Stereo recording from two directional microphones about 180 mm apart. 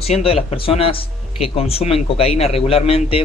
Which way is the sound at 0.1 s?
35° left (ahead or behind).